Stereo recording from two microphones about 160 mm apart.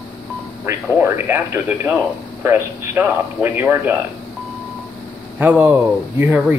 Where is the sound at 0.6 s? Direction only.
15° right (ahead or behind).